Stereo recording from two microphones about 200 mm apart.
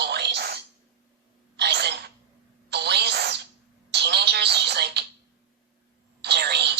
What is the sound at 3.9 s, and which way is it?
Telephone, 55° right (ahead or behind).